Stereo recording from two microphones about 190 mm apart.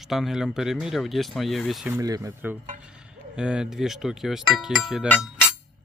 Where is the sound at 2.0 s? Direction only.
20° right (ahead or behind); by 5.0 s centre (ahead or behind).